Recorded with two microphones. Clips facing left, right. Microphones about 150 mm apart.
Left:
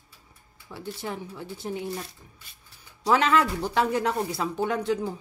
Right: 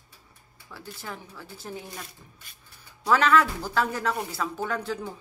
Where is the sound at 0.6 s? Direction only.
25° left (ahead or behind).